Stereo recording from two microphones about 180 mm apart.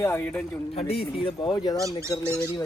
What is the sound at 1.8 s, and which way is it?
Speech, 15° right (ahead or behind).